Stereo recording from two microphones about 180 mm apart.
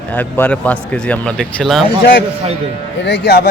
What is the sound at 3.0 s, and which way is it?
Speech, 70° left (ahead or behind).